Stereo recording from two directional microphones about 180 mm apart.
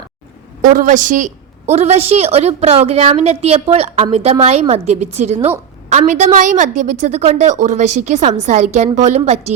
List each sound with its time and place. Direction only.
0.6 s a woman's voice: 45° right (ahead or behind)